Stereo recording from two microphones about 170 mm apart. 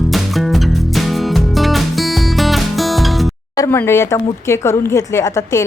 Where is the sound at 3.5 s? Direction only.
15° left (ahead or behind).